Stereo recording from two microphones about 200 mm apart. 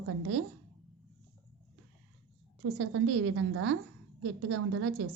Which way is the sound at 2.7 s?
70° right (ahead or behind).